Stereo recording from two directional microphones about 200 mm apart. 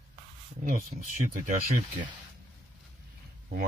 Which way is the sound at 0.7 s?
40° right (ahead or behind).